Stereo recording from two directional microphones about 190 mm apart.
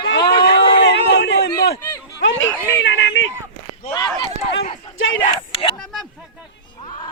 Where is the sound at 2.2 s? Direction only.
90° left.